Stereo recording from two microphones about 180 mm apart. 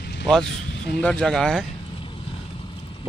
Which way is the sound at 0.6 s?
75° left (ahead or behind).